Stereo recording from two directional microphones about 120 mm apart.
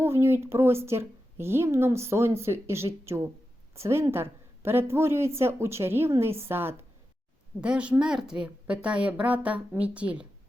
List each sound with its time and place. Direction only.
0.0 s a woman's voice: 20° right (ahead or behind)